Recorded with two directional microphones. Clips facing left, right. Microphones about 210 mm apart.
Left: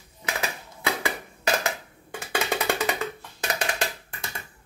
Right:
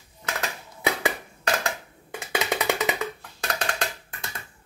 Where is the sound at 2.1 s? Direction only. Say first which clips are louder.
Even; 20° right (ahead or behind).